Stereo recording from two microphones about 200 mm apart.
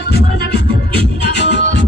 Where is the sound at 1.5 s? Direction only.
60° left (ahead or behind).